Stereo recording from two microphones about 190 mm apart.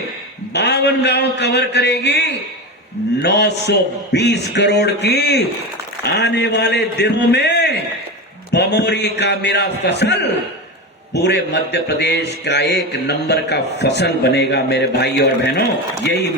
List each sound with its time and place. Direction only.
0.5 s mantra: 60° left (ahead or behind)